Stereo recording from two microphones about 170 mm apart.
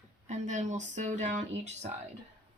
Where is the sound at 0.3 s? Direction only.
45° right (ahead or behind).